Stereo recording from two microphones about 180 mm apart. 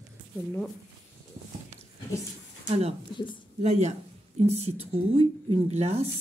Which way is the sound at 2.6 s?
35° right (ahead or behind).